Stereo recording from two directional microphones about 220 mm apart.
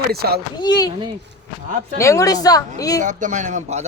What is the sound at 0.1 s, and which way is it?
Speech, 45° right (ahead or behind).